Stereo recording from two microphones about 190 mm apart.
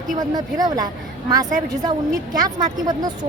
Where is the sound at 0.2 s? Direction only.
20° right (ahead or behind).